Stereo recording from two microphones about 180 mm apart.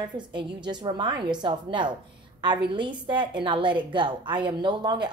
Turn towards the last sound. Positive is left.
turn(degrees=-25)  # may be behind; listen again after turning